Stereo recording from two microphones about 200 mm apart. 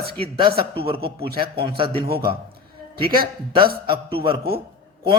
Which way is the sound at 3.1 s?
25° right (ahead or behind).